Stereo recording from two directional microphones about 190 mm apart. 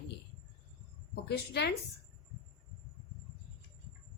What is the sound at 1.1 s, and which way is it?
Speech, 60° left (ahead or behind).